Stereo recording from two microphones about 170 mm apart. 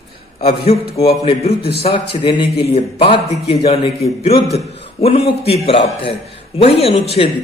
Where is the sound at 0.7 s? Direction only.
35° left (ahead or behind).